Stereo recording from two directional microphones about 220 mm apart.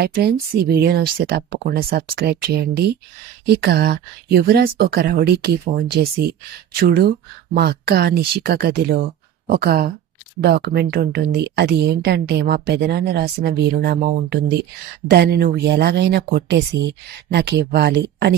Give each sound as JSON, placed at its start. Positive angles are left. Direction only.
{"t": 0.0, "sound": "speech", "side_deg": -45}